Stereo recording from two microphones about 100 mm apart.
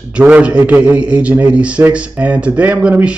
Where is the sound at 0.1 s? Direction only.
10° right (ahead or behind).